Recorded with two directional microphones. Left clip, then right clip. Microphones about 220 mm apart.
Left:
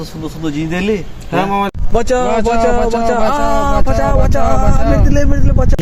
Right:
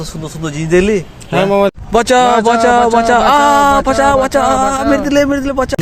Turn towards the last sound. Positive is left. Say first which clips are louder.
# right 5 dB
turn(degrees=-45)  # may be behind; listen again after turning